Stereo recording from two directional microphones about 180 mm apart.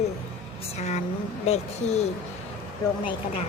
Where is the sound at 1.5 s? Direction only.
35° left (ahead or behind).